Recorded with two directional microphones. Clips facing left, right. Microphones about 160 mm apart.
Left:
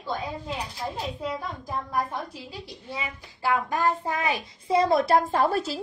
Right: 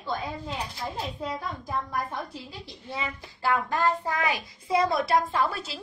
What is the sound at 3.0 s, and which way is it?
Child singing, 15° left (ahead or behind).